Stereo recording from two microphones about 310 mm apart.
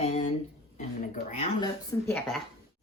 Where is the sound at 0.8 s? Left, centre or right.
Left; by 2.4 s centre.